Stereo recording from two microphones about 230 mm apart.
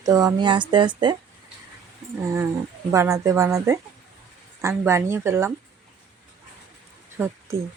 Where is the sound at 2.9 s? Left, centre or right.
Centre.